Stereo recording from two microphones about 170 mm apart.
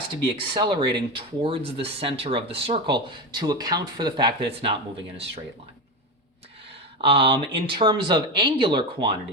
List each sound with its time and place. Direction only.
0.3 s speech: 30° right (ahead or behind)
7.0 s speech: 30° right (ahead or behind)